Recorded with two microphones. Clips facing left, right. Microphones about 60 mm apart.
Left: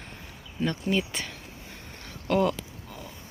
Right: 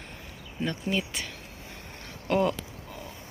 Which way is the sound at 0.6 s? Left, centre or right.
Centre.